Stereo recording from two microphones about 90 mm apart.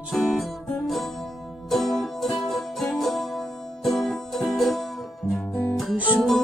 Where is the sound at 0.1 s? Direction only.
Centre (ahead or behind).